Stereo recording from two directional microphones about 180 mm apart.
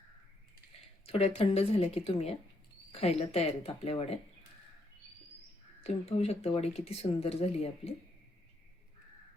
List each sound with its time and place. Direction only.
1.0 s speech: 35° left (ahead or behind)
5.8 s speech: 35° left (ahead or behind)